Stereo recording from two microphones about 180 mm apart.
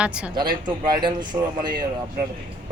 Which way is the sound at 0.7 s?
25° right (ahead or behind).